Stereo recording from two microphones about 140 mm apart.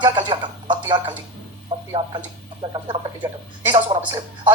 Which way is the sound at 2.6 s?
35° right (ahead or behind).